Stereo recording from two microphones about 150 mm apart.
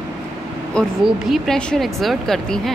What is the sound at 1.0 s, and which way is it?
A woman's voice, centre (ahead or behind).